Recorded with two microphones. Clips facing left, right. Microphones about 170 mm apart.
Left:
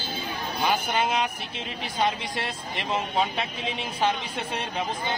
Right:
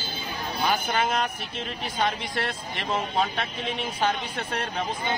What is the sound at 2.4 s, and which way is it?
Speech, 5° left (ahead or behind).